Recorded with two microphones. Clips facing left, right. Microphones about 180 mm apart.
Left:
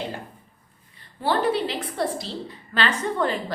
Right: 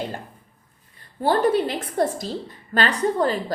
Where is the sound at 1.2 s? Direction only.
45° right (ahead or behind).